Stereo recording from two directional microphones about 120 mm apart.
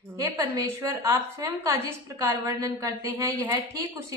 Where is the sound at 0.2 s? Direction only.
20° right (ahead or behind).